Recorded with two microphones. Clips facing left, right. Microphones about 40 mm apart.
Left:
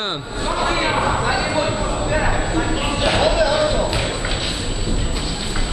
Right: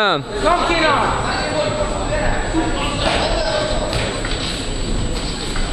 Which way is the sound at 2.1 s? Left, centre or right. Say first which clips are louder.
Left 1 dB; centre.